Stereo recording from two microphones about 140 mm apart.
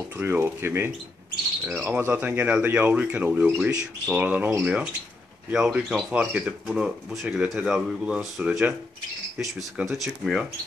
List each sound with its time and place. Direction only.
0.2 s speech: 15° right (ahead or behind); by 10.4 s centre (ahead or behind)